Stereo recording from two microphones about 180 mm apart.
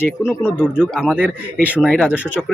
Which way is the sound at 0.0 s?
15° left (ahead or behind).